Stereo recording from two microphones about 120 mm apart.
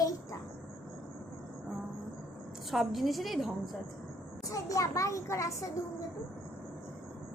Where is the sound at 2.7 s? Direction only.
Centre (ahead or behind).